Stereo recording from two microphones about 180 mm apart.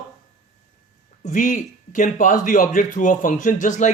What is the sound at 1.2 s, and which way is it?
Speech, 45° left (ahead or behind).